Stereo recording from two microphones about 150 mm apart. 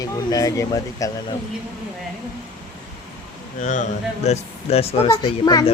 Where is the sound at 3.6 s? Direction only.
55° left (ahead or behind).